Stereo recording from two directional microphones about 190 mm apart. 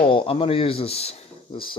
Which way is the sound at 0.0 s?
25° left (ahead or behind).